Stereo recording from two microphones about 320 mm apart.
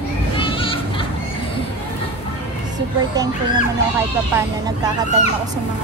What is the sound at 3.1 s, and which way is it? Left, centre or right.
Speech, centre.